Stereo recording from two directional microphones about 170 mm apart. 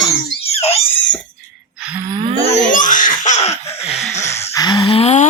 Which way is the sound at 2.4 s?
40° left (ahead or behind).